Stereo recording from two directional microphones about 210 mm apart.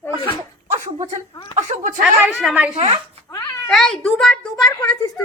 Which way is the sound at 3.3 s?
10° left (ahead or behind).